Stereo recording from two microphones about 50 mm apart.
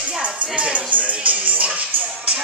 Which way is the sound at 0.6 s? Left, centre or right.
Right.